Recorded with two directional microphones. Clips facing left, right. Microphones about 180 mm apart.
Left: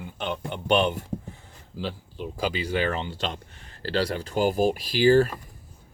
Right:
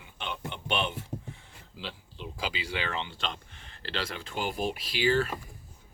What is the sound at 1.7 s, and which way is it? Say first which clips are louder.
Speech: left 9 dB; 45° left (ahead or behind).